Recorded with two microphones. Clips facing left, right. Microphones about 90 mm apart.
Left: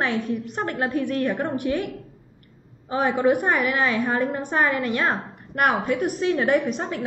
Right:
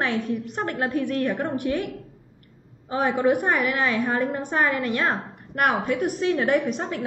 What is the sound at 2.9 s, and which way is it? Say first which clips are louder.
A woman's voice: left 1 dB; 15° left (ahead or behind).